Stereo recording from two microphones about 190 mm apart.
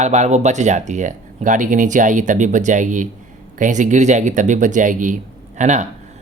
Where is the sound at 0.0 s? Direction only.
40° right (ahead or behind).